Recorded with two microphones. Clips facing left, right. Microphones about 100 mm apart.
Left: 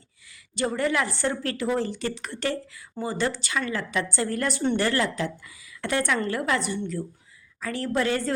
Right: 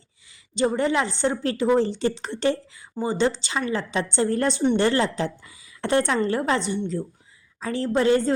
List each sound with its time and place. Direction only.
0.5 s a woman's voice: 20° right (ahead or behind)